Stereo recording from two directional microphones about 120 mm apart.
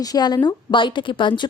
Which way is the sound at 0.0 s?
35° left (ahead or behind).